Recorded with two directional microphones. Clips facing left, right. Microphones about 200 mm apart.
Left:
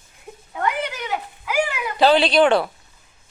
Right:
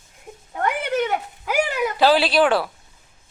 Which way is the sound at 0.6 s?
55° right (ahead or behind).